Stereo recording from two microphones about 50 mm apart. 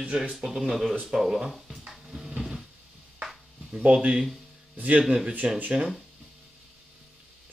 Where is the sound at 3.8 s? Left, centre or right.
Right.